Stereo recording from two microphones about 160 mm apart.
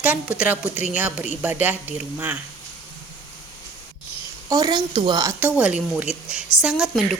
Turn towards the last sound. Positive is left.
turn(degrees=0)  # may be behind; listen again after turning